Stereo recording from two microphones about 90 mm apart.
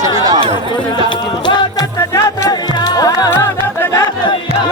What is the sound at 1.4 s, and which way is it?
Music, 60° left (ahead or behind).